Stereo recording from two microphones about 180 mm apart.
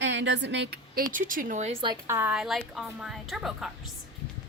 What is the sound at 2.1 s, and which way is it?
A woman's voice, 10° right (ahead or behind).